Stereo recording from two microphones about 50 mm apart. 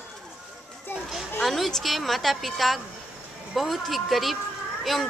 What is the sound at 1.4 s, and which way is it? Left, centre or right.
A woman's voice, centre.